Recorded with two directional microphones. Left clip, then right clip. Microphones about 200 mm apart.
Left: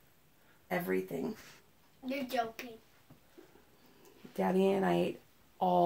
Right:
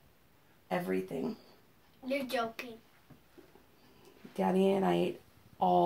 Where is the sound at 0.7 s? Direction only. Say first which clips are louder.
Even; 45° left (ahead or behind).